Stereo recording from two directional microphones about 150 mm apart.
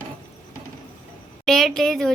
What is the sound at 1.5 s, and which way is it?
Speech, centre (ahead or behind).